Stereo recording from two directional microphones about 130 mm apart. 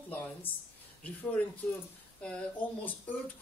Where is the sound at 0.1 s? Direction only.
15° left (ahead or behind).